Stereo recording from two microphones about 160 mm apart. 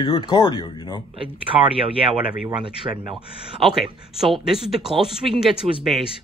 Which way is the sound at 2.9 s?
20° right (ahead or behind).